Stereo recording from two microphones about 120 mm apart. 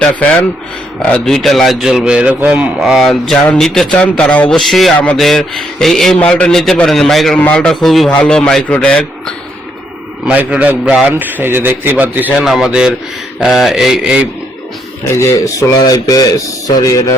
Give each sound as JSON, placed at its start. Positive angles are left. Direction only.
{"t": 1.0, "sound": "a man's voice", "side_deg": 5}
{"t": 10.2, "sound": "a man's voice", "side_deg": -10}
{"t": 15.0, "sound": "a man's voice", "side_deg": 25}